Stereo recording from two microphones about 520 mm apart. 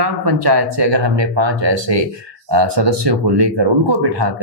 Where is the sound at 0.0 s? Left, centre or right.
Right.